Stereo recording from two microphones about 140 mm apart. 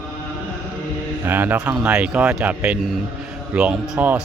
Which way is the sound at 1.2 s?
15° right (ahead or behind).